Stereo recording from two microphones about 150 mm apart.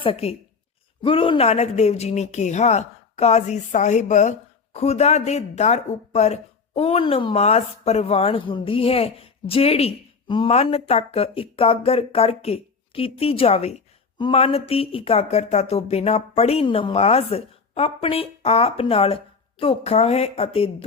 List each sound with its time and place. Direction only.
0.0 s speech: 40° left (ahead or behind)